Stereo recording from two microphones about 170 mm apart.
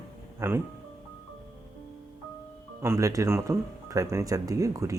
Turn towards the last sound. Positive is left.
turn(degrees=-20)  # may be behind; listen again after turning